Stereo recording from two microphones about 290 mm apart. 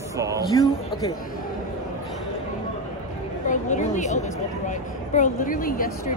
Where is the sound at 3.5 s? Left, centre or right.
Left.